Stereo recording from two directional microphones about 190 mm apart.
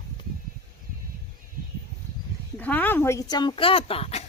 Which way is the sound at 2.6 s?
10° left (ahead or behind).